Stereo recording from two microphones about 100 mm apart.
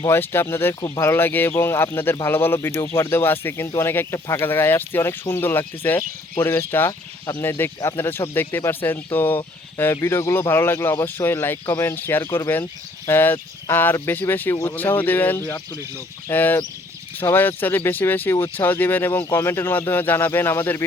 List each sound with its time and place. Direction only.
0.1 s speech: 25° left (ahead or behind)
14.5 s speech: 30° left (ahead or behind)
14.8 s speech: 20° left (ahead or behind)
15.4 s speech: 35° left (ahead or behind)
16.3 s speech: 20° left (ahead or behind)